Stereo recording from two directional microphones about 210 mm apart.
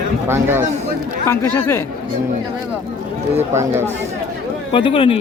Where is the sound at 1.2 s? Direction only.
10° left (ahead or behind).